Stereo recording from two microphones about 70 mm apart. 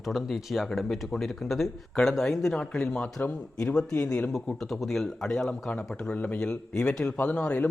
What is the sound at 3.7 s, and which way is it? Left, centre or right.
A man's voice, centre.